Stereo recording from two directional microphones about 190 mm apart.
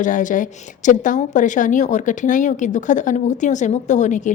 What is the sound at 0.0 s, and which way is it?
A woman's voice, 40° left (ahead or behind).